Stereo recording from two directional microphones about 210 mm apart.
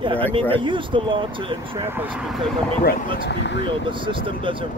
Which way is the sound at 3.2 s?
55° left (ahead or behind).